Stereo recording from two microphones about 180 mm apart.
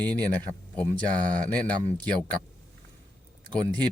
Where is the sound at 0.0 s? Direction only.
5° left (ahead or behind).